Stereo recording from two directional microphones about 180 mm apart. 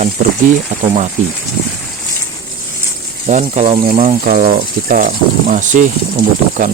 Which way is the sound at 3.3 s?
40° right (ahead or behind).